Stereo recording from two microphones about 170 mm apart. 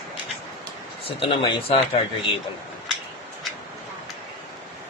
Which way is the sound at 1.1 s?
30° left (ahead or behind).